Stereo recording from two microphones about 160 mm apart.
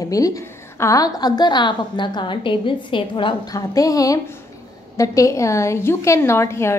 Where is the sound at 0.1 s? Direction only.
20° left (ahead or behind).